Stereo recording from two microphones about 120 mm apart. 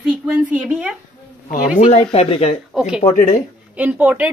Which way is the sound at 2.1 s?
55° left (ahead or behind).